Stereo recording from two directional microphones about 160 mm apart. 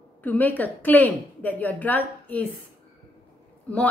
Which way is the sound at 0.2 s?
10° left (ahead or behind).